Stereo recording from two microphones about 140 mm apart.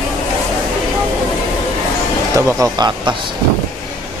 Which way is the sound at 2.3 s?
25° right (ahead or behind).